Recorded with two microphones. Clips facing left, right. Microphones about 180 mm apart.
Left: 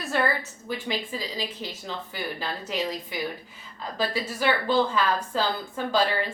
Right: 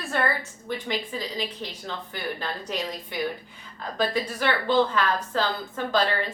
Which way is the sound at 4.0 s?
10° left (ahead or behind).